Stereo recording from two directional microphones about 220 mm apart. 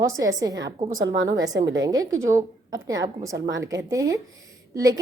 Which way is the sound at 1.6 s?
55° right (ahead or behind).